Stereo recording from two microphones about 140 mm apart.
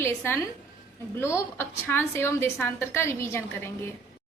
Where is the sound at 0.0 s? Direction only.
20° left (ahead or behind).